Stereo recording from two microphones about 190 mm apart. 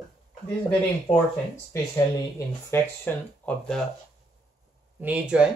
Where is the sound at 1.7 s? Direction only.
15° left (ahead or behind).